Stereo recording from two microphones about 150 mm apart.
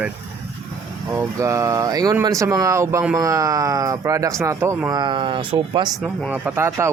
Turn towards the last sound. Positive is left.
turn(degrees=-20)  # may be behind; listen again after turning